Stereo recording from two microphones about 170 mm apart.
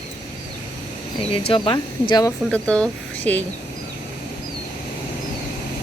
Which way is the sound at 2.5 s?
5° left (ahead or behind).